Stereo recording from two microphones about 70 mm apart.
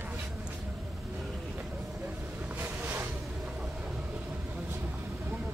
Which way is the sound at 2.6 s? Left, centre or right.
Right.